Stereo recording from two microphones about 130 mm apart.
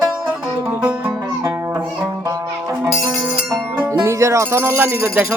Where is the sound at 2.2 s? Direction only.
25° right (ahead or behind).